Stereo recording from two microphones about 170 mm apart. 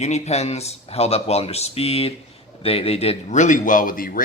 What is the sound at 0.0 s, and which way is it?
A man's voice, 40° left (ahead or behind).